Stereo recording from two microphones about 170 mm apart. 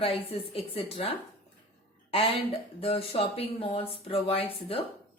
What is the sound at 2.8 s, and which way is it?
Speech, 35° left (ahead or behind).